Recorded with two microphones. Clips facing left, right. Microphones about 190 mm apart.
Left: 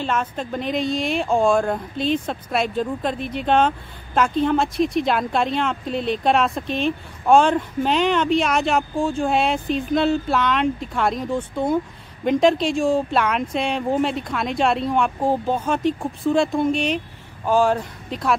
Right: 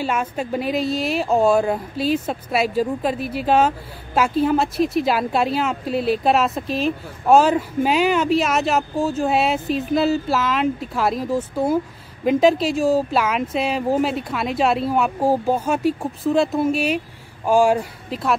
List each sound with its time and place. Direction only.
0.0 s speech: 10° right (ahead or behind)